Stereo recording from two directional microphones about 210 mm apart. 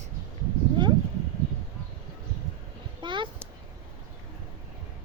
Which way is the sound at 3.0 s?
20° right (ahead or behind).